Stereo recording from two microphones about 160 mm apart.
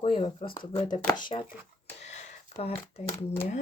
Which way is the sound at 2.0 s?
45° left (ahead or behind).